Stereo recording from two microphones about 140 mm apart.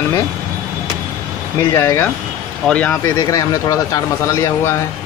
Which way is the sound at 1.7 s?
20° left (ahead or behind).